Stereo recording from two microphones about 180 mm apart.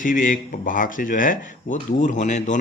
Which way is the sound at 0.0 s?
45° left (ahead or behind).